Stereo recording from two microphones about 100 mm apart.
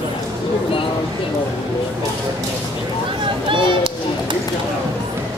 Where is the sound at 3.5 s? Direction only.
55° right (ahead or behind).